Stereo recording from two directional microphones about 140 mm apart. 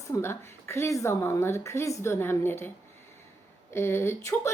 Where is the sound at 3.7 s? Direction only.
20° left (ahead or behind).